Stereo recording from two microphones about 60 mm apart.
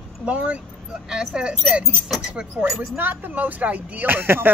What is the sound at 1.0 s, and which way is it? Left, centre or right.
A woman's voice, centre.